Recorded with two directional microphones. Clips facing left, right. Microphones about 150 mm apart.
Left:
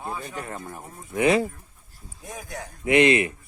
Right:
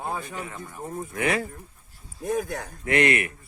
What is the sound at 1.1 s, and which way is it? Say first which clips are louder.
Speech: left 6 dB; 20° left (ahead or behind).